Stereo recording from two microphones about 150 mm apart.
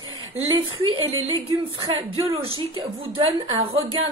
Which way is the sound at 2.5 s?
35° right (ahead or behind).